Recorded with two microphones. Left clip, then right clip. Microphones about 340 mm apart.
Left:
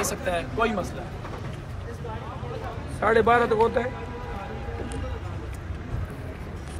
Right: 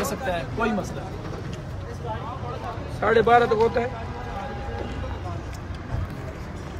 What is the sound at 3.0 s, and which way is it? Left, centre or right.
Speech, left.